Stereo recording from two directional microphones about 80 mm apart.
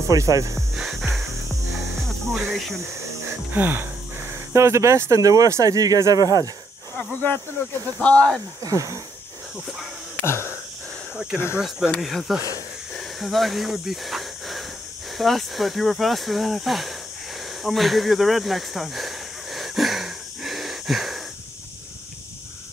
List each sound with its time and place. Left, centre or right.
0.1 s speech: right
0.7 s music: centre
2.4 s speech: centre
3.5 s speech: right
8.0 s speech: centre
8.6 s speech: right
10.2 s a sound: left
12.0 s speech: centre
12.9 s hiss: centre
15.1 s speech: centre
17.6 s a sound: centre